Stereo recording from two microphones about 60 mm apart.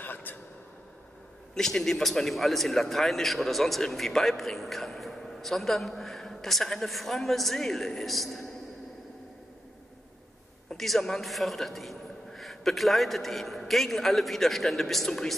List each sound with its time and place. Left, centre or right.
0.0 s a sound: left
1.5 s a man's voice: centre
10.8 s a man's voice: centre